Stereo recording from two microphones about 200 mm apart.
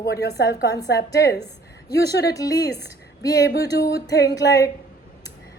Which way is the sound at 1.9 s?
55° left (ahead or behind).